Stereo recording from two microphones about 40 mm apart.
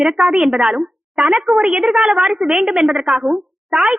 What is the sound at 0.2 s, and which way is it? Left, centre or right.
A woman's voice, right.